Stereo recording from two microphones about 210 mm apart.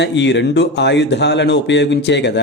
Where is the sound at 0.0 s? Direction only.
55° left (ahead or behind).